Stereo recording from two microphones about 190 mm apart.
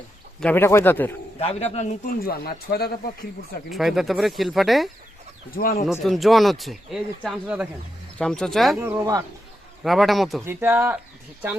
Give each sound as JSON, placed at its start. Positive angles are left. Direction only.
{"t": 0.3, "sound": "speech", "side_deg": 10}
{"t": 1.4, "sound": "a man's voice", "side_deg": 35}
{"t": 3.7, "sound": "speech", "side_deg": 0}
{"t": 5.5, "sound": "speech", "side_deg": 50}
{"t": 5.9, "sound": "speech", "side_deg": 0}
{"t": 8.8, "sound": "speech", "side_deg": -15}
{"t": 9.8, "sound": "speech", "side_deg": 0}
{"t": 10.4, "sound": "speech", "side_deg": -10}